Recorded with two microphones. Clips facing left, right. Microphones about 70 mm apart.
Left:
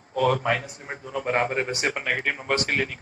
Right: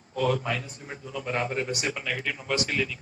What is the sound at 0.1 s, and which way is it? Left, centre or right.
A man's voice, left.